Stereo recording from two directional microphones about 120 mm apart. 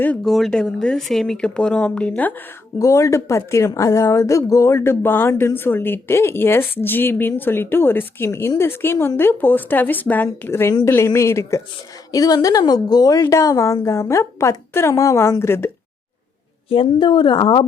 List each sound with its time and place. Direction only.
0.3 s speech: centre (ahead or behind)
2.7 s a woman's voice: 25° left (ahead or behind)
16.6 s a woman's voice: 50° left (ahead or behind)